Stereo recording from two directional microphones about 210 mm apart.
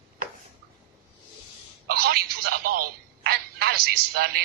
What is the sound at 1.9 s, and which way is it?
Speech, 45° right (ahead or behind).